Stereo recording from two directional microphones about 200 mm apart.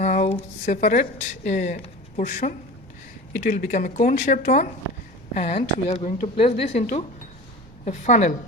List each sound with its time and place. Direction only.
0.0 s a sound: 35° left (ahead or behind)
0.6 s speech: 40° left (ahead or behind)
7.9 s speech: 35° left (ahead or behind)